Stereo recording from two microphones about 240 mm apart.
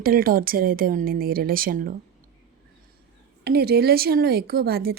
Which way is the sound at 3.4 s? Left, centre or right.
Right.